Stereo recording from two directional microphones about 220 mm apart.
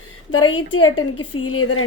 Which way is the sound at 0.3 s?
80° left.